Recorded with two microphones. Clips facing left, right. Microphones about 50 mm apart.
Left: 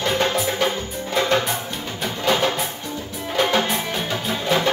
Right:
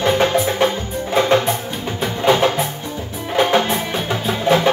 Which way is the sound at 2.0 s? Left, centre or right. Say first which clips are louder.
Right 5 dB; centre.